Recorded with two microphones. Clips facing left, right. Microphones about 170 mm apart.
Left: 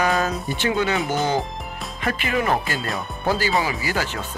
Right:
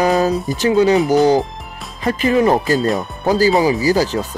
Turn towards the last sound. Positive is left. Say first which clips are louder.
# right 10 dB
turn(degrees=-35)  # may be behind; listen again after turning